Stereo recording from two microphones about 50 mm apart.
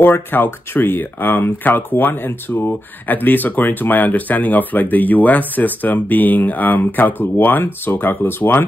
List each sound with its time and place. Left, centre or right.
0.0 s speech: left